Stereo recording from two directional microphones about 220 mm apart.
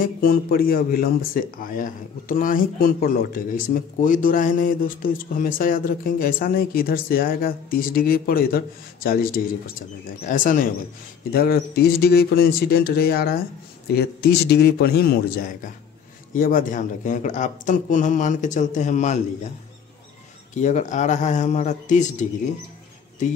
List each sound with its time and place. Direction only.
0.0 s speech: 40° left (ahead or behind)
20.5 s speech: 35° left (ahead or behind)